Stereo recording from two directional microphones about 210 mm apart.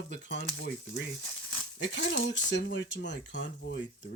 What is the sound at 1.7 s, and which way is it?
Speech, 55° left (ahead or behind).